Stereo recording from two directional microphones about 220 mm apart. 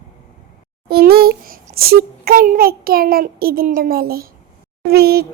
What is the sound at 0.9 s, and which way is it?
A child's voice, 45° right (ahead or behind).